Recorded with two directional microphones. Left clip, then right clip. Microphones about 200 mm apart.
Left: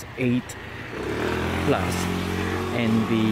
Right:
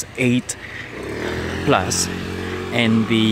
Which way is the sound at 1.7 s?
25° right (ahead or behind).